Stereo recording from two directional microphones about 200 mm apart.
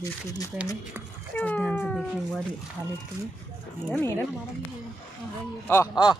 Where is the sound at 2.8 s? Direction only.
20° right (ahead or behind).